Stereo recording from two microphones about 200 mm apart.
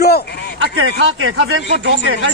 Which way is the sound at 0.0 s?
55° left (ahead or behind).